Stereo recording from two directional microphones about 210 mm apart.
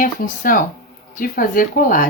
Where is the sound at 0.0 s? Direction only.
40° left (ahead or behind).